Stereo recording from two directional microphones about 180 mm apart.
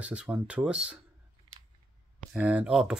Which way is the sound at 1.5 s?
30° right (ahead or behind).